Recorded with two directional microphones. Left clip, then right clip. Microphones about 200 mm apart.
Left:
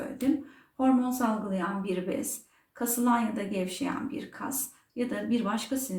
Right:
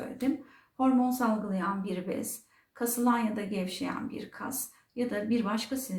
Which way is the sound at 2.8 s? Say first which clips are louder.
Left 1 dB; 25° right (ahead or behind).